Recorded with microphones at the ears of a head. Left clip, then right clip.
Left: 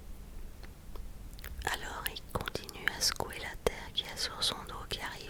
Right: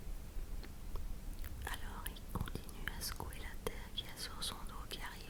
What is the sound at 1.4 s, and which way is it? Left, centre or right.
Whispering, left.